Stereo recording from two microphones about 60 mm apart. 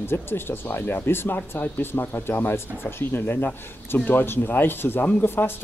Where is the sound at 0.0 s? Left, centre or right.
Left.